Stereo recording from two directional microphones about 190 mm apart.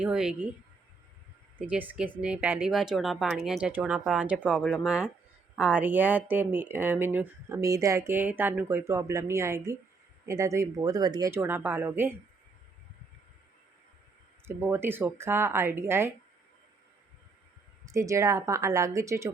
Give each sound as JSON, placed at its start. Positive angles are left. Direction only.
{"t": 0.0, "sound": "speech", "side_deg": -5}
{"t": 1.6, "sound": "speech", "side_deg": -5}
{"t": 14.4, "sound": "speech", "side_deg": -10}
{"t": 17.9, "sound": "speech", "side_deg": -15}